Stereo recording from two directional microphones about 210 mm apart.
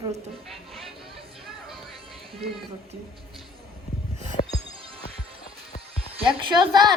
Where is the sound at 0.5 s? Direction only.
Centre (ahead or behind).